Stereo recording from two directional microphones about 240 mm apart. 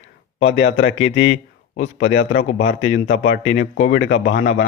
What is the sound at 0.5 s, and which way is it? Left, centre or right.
Speech, left.